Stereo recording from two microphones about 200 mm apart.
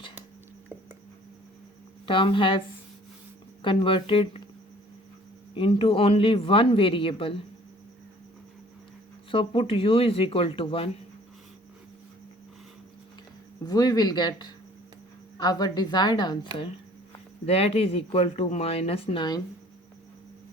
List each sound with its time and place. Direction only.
2.0 s speech: 25° left (ahead or behind)
3.6 s speech: 25° left (ahead or behind)
5.5 s speech: 25° left (ahead or behind)
9.3 s speech: 25° left (ahead or behind)
13.7 s speech: 20° left (ahead or behind)